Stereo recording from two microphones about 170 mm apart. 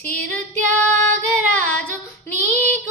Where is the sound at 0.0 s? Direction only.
10° left (ahead or behind).